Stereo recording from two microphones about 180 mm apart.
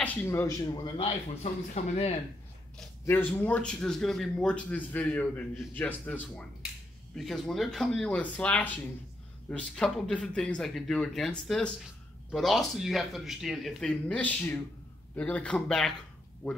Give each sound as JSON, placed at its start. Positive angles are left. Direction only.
{"t": 0.0, "sound": "speech", "side_deg": 10}
{"t": 3.1, "sound": "speech", "side_deg": 10}